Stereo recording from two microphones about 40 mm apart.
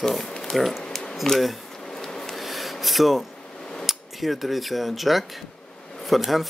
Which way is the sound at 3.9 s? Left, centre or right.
Centre.